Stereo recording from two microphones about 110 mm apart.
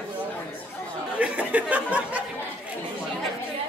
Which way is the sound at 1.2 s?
15° right (ahead or behind).